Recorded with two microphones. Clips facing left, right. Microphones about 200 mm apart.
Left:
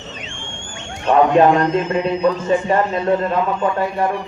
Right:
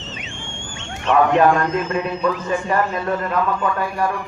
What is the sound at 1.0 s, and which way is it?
A man's voice, 20° left (ahead or behind).